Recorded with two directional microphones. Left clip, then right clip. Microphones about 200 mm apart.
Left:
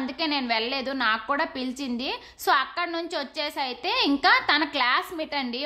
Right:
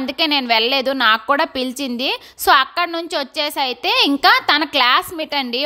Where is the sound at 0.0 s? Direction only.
40° right (ahead or behind).